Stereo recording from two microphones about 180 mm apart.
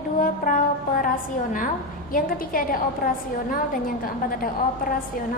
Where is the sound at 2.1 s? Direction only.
50° left (ahead or behind).